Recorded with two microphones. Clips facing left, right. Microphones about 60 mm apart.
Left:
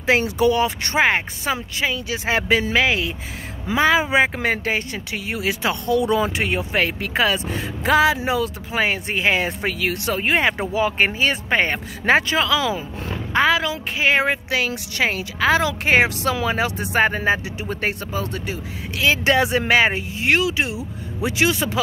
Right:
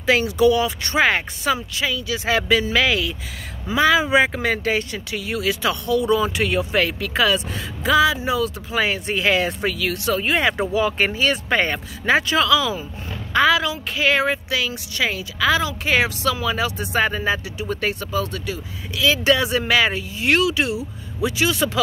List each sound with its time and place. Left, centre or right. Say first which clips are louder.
0.0 s speech: right 1 dB; left
0.9 s speech: right 1 dB; left
5.9 s a woman's voice: even; left
6.2 s speech: right 1 dB; left
7.8 s a woman's voice: even; left
8.3 s a woman's voice: even; left
13.9 s speech: left 1 dB; left
14.2 s a woman's voice: left 1 dB; left
20.2 s speech: right 1 dB; left
21.2 s speech: left 1 dB; left